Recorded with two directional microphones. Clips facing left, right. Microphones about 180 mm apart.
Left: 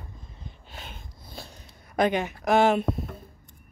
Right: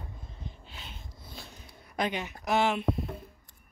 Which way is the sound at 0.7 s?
50° left (ahead or behind).